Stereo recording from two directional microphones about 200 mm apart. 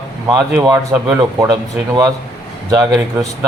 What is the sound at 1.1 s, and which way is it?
Speech, 20° right (ahead or behind).